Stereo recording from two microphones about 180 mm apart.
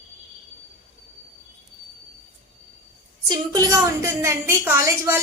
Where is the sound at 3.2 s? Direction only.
20° right (ahead or behind).